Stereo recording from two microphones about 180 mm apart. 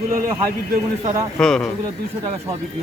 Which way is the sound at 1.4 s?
Centre (ahead or behind).